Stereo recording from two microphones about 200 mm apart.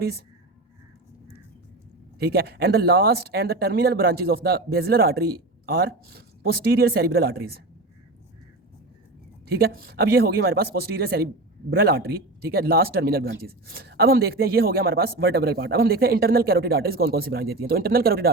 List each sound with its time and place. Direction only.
2.1 s speech: 55° right (ahead or behind)
9.5 s speech: 50° right (ahead or behind)